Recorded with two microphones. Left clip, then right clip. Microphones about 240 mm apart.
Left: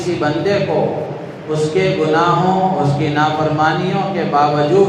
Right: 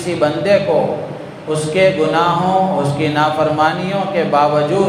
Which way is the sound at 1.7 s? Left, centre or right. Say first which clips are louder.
Right 3 dB; right.